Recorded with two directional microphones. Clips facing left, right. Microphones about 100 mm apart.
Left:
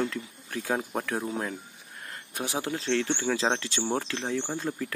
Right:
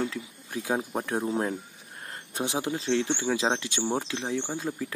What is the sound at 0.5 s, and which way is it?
Speech, 15° right (ahead or behind).